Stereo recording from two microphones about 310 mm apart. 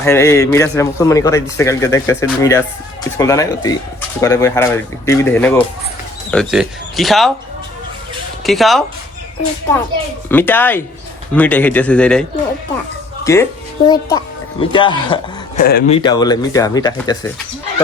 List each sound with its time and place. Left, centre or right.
0.0 s a man's voice: centre
8.4 s speech: centre
10.2 s a man's voice: centre
13.2 s a man's voice: centre
15.6 s speech: left
16.0 s a man's voice: centre